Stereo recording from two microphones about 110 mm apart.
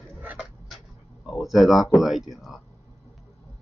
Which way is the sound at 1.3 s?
Centre (ahead or behind).